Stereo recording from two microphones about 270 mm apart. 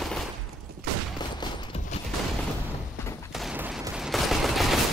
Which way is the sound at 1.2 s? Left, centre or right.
Centre.